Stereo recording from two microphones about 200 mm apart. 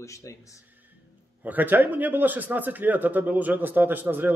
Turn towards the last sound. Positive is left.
turn(degrees=-10)  # may be behind; listen again after turning